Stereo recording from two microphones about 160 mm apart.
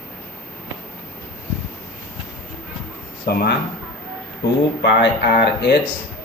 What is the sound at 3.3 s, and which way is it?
Speech, 80° left.